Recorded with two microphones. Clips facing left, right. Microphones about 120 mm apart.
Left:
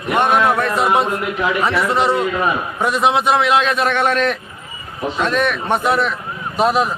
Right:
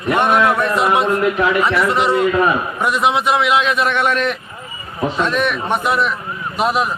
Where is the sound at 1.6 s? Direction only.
35° left (ahead or behind).